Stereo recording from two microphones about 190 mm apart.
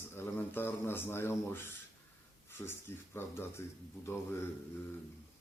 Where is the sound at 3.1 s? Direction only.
10° left (ahead or behind).